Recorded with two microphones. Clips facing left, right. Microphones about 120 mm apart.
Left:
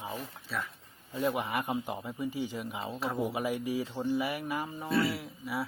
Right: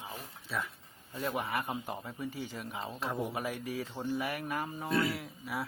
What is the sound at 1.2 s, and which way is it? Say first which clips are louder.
A man's voice: left 3 dB; 15° left (ahead or behind).